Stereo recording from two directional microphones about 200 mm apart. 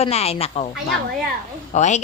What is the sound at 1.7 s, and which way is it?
Speech, 35° left (ahead or behind).